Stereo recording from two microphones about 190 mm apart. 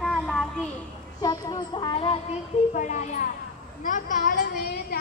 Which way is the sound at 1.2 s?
20° left (ahead or behind).